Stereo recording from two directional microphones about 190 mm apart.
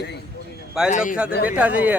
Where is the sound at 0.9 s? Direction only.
40° left (ahead or behind).